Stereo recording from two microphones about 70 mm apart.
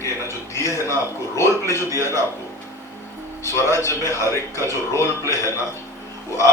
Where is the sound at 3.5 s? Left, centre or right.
Left.